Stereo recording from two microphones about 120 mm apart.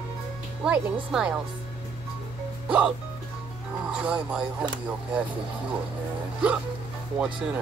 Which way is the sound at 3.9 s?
10° right (ahead or behind).